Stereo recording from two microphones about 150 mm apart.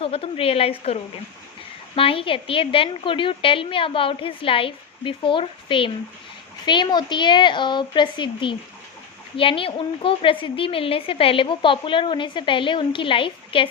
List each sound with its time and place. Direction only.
0.0 s a woman's voice: 40° left (ahead or behind)
2.0 s a woman's voice: 35° left (ahead or behind)